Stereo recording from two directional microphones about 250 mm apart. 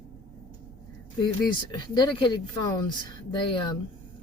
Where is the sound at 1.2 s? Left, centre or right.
Centre.